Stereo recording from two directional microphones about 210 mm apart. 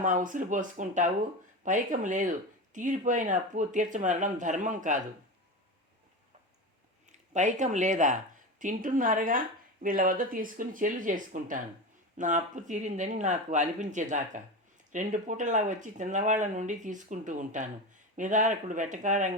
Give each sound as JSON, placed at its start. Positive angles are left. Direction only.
{"t": 0.0, "sound": "speech", "side_deg": -40}
{"t": 7.1, "sound": "speech", "side_deg": -35}